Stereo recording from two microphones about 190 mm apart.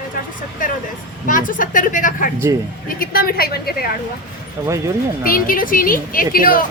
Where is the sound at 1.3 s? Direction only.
45° left (ahead or behind).